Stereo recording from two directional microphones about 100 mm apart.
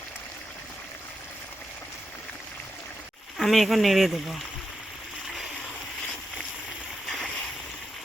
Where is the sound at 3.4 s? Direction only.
Centre (ahead or behind).